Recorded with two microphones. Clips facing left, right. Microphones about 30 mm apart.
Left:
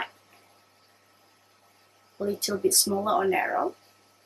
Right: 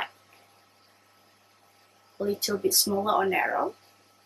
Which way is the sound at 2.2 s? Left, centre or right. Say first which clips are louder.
Right 1 dB; right.